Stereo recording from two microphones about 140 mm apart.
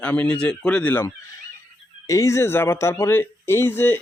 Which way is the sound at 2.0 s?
20° left (ahead or behind).